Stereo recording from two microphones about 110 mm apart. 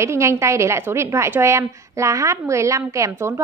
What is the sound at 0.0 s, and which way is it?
A woman's voice, 25° right (ahead or behind).